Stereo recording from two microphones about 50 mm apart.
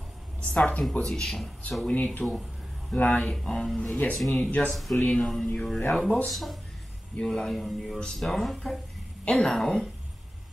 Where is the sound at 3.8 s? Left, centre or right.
Left.